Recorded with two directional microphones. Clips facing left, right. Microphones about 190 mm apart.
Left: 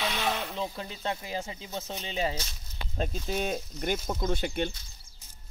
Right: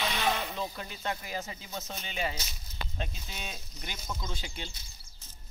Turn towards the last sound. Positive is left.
turn(degrees=60)  # may be behind; listen again after turning